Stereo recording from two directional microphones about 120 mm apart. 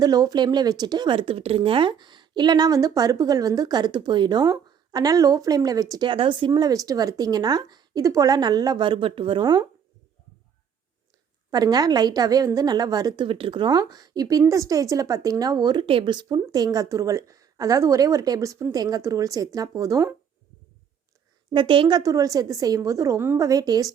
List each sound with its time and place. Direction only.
0.0 s speech: 35° right (ahead or behind)
6.1 s speech: 45° right (ahead or behind)
11.5 s speech: 35° right (ahead or behind)
13.2 s speech: 50° right (ahead or behind); by 20.1 s 25° right (ahead or behind)
21.5 s speech: 45° right (ahead or behind)